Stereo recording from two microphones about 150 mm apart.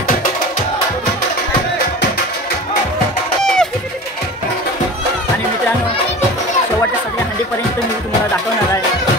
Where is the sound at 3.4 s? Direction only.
5° left (ahead or behind).